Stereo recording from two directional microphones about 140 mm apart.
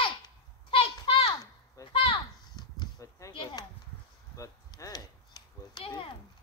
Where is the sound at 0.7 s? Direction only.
40° left (ahead or behind).